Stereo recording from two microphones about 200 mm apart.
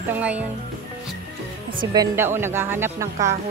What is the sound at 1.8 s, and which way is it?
A woman's voice, 20° right (ahead or behind).